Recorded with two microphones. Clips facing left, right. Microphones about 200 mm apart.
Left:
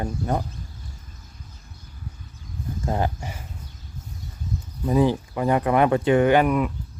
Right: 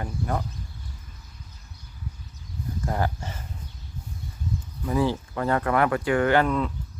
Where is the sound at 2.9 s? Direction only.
20° left (ahead or behind).